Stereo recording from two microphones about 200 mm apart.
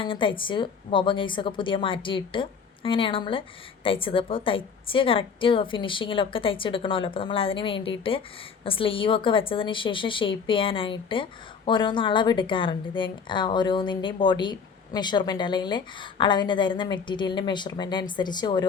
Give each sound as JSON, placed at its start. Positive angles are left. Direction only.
{"t": 0.0, "sound": "a woman's voice", "side_deg": 25}